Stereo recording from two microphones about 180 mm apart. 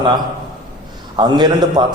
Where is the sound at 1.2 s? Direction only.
25° right (ahead or behind).